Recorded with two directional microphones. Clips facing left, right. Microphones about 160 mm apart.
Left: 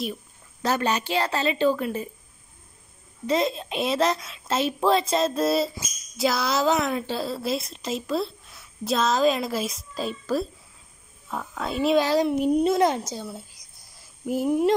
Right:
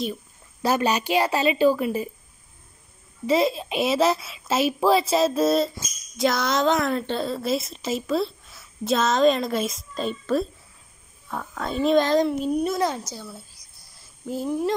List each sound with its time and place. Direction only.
0.0 s a sound: centre (ahead or behind)
0.7 s a woman's voice: 10° right (ahead or behind)
3.3 s a woman's voice: 5° right (ahead or behind); by 14.7 s 15° left (ahead or behind)